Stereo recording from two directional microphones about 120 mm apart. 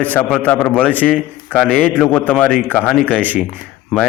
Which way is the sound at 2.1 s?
10° left (ahead or behind).